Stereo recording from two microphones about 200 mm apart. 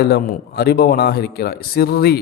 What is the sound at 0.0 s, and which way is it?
A man's voice, 50° left (ahead or behind).